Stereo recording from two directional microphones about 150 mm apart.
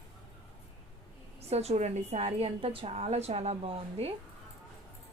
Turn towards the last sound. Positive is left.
turn(degrees=-40)  # may be behind; listen again after turning